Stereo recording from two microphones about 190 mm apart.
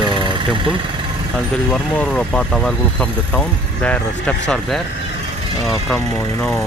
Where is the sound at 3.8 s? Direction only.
5° left (ahead or behind).